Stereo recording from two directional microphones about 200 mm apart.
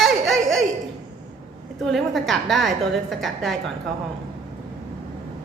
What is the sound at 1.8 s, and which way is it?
A woman's voice, centre (ahead or behind).